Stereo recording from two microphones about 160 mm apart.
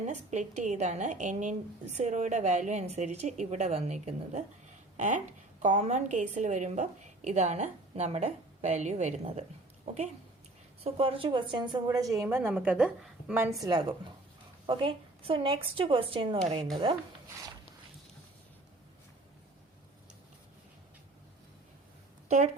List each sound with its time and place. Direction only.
0.0 s speech: 45° right (ahead or behind); by 11.8 s 30° right (ahead or behind)
12.1 s a woman's voice: 15° right (ahead or behind); by 16.4 s 35° right (ahead or behind)